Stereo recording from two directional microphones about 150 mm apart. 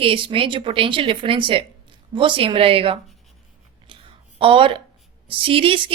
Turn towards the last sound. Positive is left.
turn(degrees=-35)  # may be behind; listen again after turning